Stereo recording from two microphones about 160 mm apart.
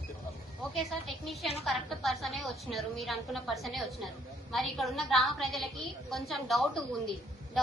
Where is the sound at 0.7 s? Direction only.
Centre (ahead or behind).